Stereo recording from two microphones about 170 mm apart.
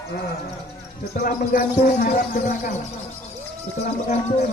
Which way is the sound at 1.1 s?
55° left (ahead or behind).